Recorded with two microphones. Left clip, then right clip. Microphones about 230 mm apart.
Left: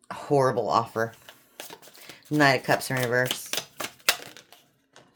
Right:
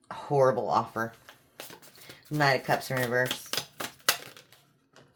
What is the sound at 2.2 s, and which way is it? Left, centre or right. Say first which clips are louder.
Speech: left 4 dB; left.